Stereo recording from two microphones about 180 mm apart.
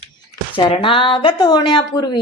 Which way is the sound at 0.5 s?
30° left (ahead or behind).